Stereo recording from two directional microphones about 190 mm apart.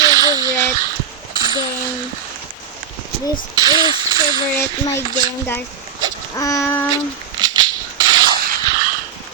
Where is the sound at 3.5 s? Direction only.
20° right (ahead or behind).